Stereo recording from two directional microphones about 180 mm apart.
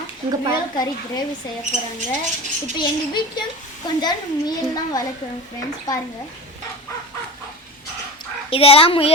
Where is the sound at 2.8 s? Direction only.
25° left (ahead or behind).